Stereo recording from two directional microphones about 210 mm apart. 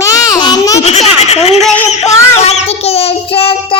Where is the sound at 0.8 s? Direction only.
30° left (ahead or behind).